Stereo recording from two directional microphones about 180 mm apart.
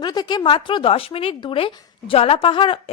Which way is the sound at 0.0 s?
25° left (ahead or behind).